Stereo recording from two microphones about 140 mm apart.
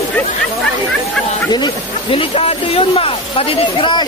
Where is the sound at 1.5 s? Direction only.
35° left (ahead or behind).